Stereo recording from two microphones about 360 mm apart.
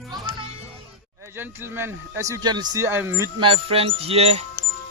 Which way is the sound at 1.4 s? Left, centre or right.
Centre.